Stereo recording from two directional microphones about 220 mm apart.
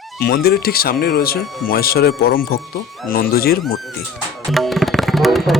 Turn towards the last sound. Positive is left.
turn(degrees=0)  # may be behind; listen again after turning